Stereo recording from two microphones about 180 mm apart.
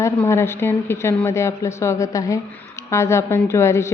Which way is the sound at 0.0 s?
15° left (ahead or behind).